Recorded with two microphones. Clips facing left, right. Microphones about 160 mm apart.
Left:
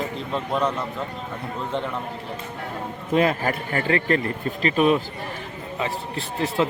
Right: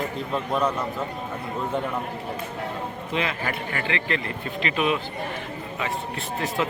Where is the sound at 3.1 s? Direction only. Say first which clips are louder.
Left 8 dB; 45° left (ahead or behind).